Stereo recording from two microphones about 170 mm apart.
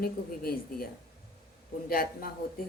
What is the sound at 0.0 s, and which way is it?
Speech, 60° left (ahead or behind).